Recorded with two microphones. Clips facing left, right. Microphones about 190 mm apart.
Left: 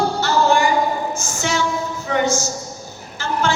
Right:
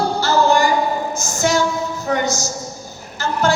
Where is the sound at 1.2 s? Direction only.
40° right (ahead or behind).